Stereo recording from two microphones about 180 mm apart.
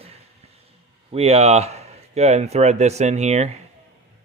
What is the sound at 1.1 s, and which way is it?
Speech, 35° right (ahead or behind).